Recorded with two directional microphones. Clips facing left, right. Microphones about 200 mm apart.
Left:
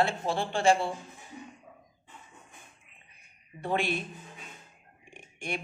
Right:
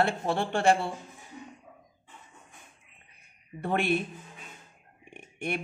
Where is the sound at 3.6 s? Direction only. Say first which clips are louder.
Right 3 dB; 60° right (ahead or behind).